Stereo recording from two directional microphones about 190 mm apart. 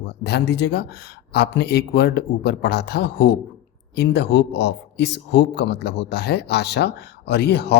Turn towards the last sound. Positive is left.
turn(degrees=60)  # may be behind; listen again after turning